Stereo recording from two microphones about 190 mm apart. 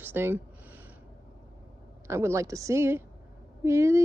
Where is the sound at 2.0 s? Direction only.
15° right (ahead or behind).